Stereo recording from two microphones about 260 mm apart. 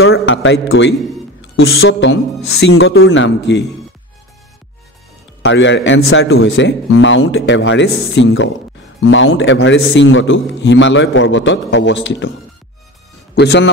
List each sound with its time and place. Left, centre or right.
0.0 s a man's voice: left
5.4 s a man's voice: left
13.3 s speech: left